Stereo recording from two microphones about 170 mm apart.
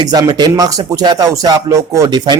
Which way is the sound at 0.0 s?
25° right (ahead or behind).